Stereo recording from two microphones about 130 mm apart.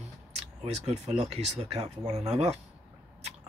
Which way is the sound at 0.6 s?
55° right (ahead or behind).